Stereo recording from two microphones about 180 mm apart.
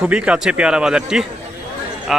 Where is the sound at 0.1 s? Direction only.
5° right (ahead or behind).